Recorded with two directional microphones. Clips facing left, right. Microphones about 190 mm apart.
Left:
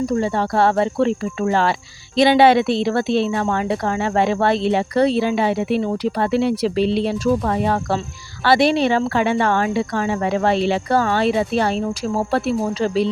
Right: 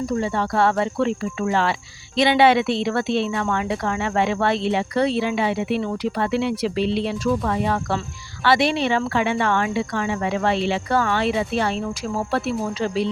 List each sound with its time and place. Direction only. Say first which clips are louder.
0.2 s speech: left 3 dB; 35° left (ahead or behind)